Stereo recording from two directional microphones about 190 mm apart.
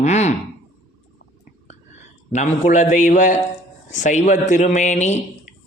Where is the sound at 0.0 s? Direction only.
35° left (ahead or behind).